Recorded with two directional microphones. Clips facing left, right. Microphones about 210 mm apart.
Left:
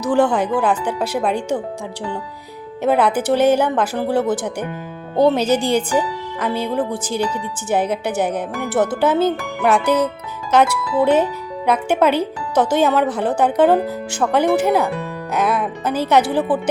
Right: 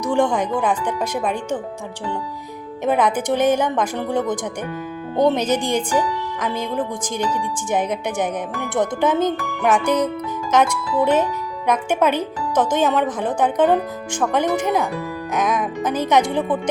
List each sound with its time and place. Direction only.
0.0 s speech: 5° left (ahead or behind)
2.8 s speech: 10° left (ahead or behind)